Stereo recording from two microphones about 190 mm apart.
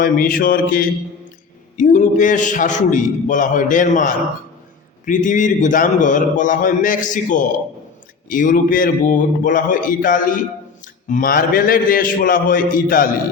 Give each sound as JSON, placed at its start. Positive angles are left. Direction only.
{"t": 0.0, "sound": "a man's voice", "side_deg": 50}